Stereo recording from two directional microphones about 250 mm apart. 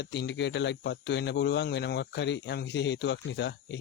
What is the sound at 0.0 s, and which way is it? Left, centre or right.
Speech, left.